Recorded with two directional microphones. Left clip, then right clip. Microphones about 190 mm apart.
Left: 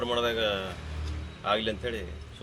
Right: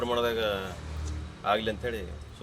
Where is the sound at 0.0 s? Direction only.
5° right (ahead or behind).